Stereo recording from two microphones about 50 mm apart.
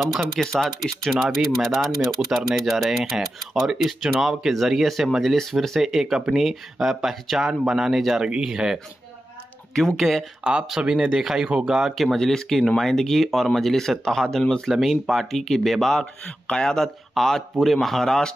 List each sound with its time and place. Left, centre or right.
0.2 s speech: centre
9.9 s speech: centre
10.4 s speech: right
11.9 s speech: centre
14.7 s speech: centre
16.4 s speech: centre